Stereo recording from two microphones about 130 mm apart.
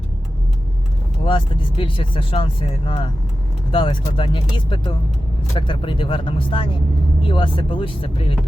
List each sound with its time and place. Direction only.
1.2 s vehicle: 40° left (ahead or behind)
1.8 s speech: 40° left (ahead or behind)